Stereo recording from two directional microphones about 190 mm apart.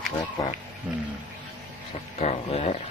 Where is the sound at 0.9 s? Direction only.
Centre (ahead or behind).